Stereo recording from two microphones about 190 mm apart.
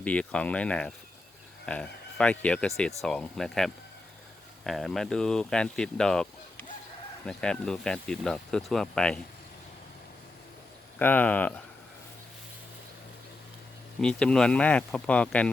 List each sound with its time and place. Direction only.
0.0 s speech: 5° left (ahead or behind)
10.9 s speech: 10° left (ahead or behind)
14.0 s speech: 5° left (ahead or behind)